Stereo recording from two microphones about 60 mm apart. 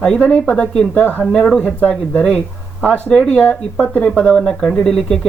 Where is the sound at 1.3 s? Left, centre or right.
Centre.